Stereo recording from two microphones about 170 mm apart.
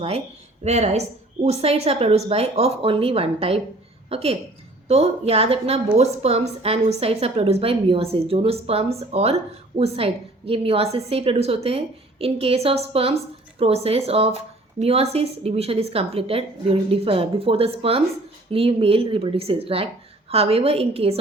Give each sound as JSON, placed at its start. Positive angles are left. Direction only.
{"t": 0.6, "sound": "a woman's voice", "side_deg": -40}